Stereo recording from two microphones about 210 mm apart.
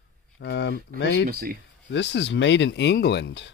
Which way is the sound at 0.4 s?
55° left (ahead or behind).